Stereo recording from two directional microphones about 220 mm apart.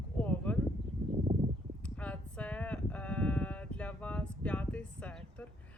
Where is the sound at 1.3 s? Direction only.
30° right (ahead or behind).